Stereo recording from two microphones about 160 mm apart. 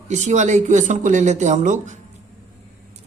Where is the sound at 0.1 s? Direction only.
50° right (ahead or behind).